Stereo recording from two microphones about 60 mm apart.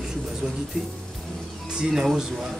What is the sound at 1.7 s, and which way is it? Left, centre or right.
Speech, centre.